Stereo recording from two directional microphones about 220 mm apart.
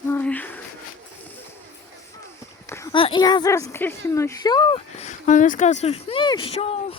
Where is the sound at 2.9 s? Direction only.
20° left (ahead or behind).